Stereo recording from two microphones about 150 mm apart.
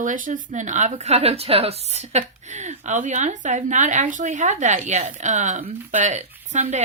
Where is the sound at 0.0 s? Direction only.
60° right (ahead or behind).